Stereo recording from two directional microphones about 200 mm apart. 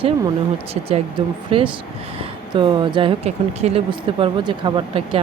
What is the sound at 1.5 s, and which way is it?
Speech, 30° right (ahead or behind).